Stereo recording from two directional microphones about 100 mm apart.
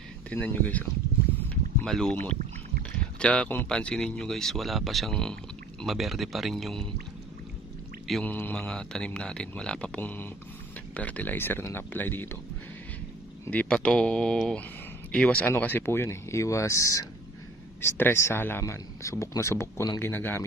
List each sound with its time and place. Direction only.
0.3 s speech: 15° left (ahead or behind)
1.9 s speech: 5° left (ahead or behind)
8.2 s speech: 15° left (ahead or behind)
13.5 s speech: 15° left (ahead or behind); by 17.1 s 35° left (ahead or behind)
17.8 s speech: 20° left (ahead or behind)